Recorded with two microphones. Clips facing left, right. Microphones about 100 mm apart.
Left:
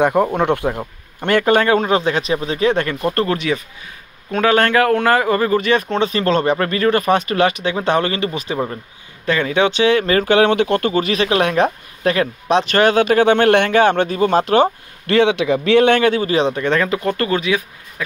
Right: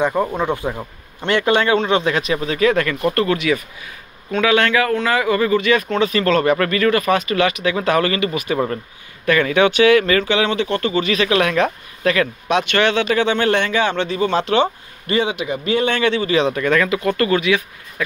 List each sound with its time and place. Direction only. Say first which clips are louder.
0.0 s speech: left 3 dB; 60° left (ahead or behind)
1.2 s a man's voice: left 2 dB; 45° left (ahead or behind)
10.2 s speech: left 5 dB; 50° left (ahead or behind)
15.0 s a man's voice: left 5 dB; 75° left (ahead or behind)
16.0 s a man's voice: left 1 dB; 45° left (ahead or behind); by 17.6 s 25° left (ahead or behind)